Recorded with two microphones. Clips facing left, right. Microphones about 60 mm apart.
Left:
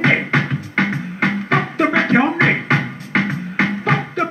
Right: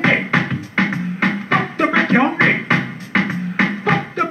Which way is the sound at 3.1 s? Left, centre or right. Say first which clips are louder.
Right 1 dB; centre.